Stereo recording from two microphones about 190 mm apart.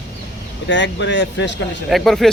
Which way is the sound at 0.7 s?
70° left (ahead or behind).